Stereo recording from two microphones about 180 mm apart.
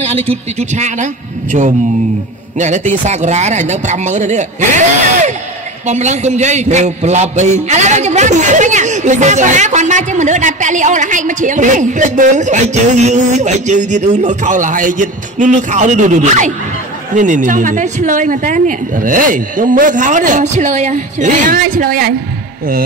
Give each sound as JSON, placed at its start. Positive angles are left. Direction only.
{"t": 0.0, "sound": "a man's voice", "side_deg": -35}